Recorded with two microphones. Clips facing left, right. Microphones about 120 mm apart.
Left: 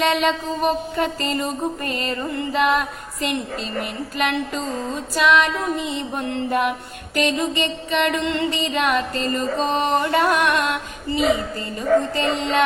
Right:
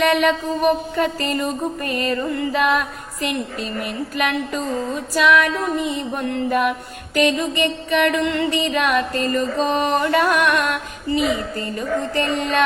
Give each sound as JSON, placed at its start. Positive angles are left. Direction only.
{"t": 0.0, "sound": "mantra", "side_deg": 20}